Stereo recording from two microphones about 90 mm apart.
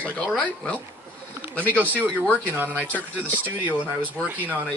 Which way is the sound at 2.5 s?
20° right (ahead or behind).